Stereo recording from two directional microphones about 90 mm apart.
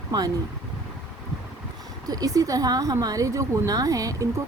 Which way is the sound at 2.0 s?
40° right (ahead or behind).